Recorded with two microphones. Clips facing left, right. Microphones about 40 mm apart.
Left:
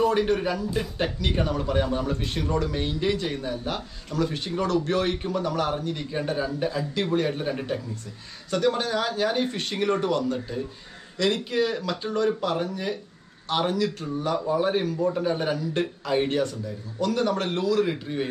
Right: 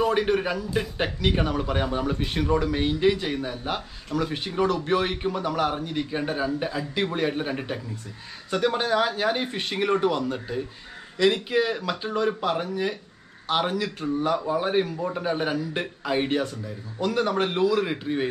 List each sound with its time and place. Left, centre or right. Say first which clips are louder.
0.1 s a man's voice: even; centre